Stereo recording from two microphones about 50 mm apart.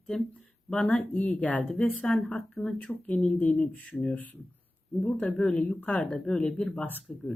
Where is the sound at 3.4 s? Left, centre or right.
Centre.